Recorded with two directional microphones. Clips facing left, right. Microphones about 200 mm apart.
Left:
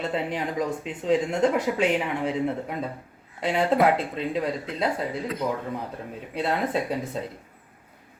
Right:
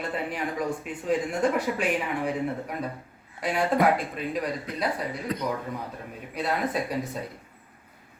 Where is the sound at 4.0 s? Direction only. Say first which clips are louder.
Left 3 dB; 25° left (ahead or behind).